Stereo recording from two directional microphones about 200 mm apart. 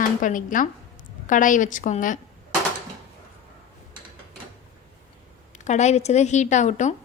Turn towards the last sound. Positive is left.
turn(degrees=35)  # may be behind; listen again after turning